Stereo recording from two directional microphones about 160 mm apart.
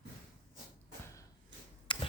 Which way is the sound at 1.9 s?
30° left (ahead or behind).